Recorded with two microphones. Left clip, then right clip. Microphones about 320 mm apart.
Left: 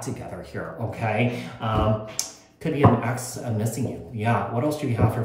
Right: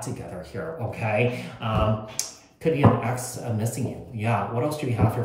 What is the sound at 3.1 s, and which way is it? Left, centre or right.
Speech, left.